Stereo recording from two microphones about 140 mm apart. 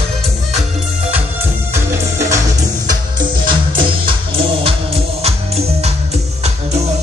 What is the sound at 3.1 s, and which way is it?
Music, 35° right (ahead or behind).